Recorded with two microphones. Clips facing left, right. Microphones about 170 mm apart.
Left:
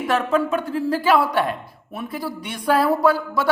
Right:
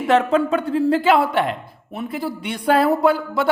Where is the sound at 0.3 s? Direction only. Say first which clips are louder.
Right 2 dB; 30° right (ahead or behind).